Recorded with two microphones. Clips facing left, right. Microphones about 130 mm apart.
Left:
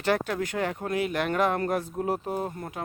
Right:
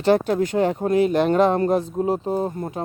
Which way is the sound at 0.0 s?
25° right (ahead or behind).